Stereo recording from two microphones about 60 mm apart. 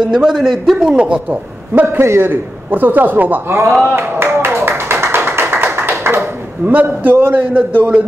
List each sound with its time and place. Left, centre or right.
0.0 s a woman's voice: centre
1.8 s a man's voice: right
2.7 s a man's voice: right
3.4 s a man's voice: right
3.9 s a sound: right
5.0 s tap: right
6.6 s a man's voice: right